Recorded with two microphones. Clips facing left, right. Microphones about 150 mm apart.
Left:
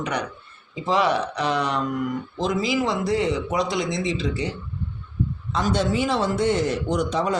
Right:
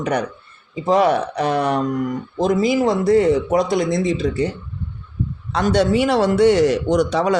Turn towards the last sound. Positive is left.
turn(degrees=-85)